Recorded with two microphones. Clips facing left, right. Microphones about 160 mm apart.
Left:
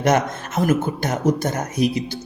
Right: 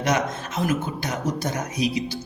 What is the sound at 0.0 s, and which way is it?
A man's voice, 50° left (ahead or behind).